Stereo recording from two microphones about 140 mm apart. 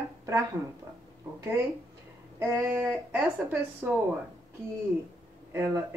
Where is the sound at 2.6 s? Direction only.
5° right (ahead or behind).